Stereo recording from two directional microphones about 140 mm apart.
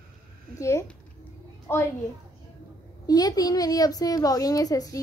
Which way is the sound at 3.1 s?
25° left (ahead or behind).